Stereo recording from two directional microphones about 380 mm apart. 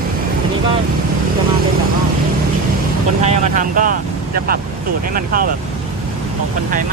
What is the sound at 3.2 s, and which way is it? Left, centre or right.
Speech, centre.